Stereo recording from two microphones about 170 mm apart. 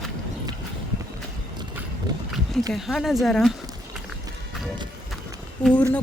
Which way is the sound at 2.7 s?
Centre (ahead or behind).